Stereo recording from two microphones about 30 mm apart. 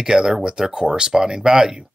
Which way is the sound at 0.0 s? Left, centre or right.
Centre.